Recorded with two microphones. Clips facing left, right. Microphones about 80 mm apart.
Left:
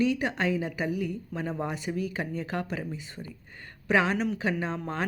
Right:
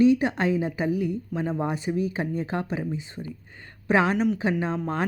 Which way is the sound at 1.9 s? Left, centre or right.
Right.